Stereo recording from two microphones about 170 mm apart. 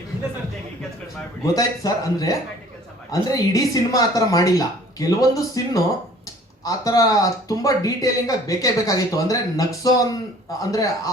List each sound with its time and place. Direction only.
1.5 s speech: 20° left (ahead or behind)